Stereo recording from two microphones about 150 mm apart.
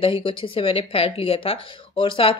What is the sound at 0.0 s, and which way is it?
A woman's voice, 35° left (ahead or behind).